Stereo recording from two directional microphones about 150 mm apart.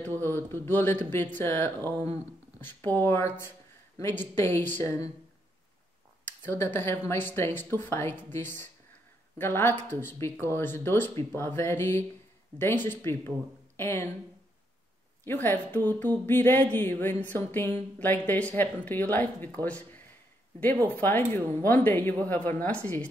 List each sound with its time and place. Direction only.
0.2 s speech: 15° left (ahead or behind)
6.2 s speech: 15° left (ahead or behind)
15.2 s speech: 15° left (ahead or behind)